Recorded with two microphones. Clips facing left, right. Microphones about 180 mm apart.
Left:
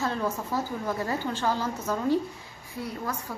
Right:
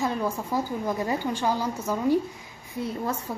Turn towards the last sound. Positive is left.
turn(degrees=-25)  # may be behind; listen again after turning